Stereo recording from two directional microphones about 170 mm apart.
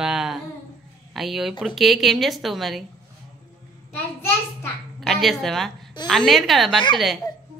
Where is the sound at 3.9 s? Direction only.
15° left (ahead or behind).